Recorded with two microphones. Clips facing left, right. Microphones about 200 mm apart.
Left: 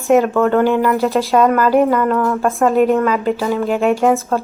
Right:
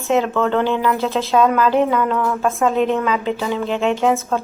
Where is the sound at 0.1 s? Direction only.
15° left (ahead or behind).